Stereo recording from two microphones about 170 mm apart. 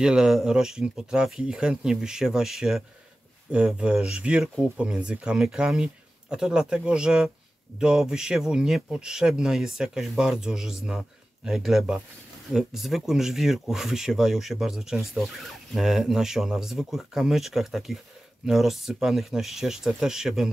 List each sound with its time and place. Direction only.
0.0 s speech: 5° right (ahead or behind)